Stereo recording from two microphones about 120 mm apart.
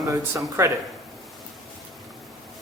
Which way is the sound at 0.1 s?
20° right (ahead or behind).